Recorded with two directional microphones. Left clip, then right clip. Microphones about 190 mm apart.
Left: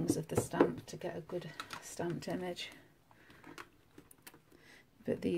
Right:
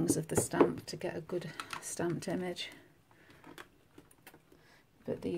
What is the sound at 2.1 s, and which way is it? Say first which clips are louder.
Speech: right 3 dB; 15° right (ahead or behind).